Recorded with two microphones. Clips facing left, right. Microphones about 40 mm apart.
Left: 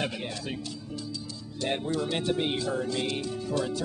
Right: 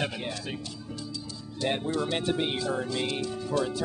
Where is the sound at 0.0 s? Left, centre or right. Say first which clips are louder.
Even; centre.